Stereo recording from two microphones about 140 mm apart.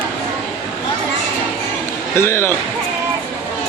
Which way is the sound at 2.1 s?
20° left (ahead or behind).